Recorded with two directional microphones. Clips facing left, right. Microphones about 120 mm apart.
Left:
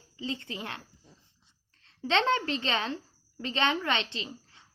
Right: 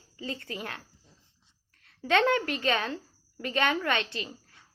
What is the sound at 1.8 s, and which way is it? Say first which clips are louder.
A woman's voice: right 2 dB; 25° left (ahead or behind).